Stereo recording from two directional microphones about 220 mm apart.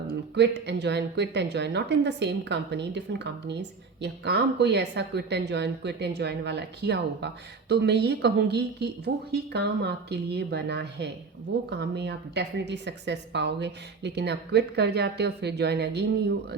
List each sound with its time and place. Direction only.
0.3 s a woman's voice: 50° right (ahead or behind)